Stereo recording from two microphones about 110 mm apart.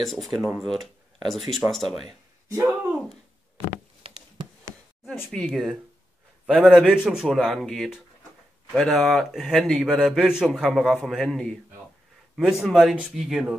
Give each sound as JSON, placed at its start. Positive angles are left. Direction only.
{"t": 0.0, "sound": "a man's voice", "side_deg": 0}
{"t": 2.5, "sound": "speech", "side_deg": -20}
{"t": 3.5, "sound": "a sound", "side_deg": -55}
{"t": 5.3, "sound": "a man's voice", "side_deg": 5}